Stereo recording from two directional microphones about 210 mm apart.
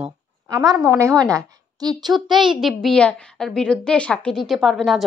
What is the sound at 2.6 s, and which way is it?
A woman's voice, centre (ahead or behind).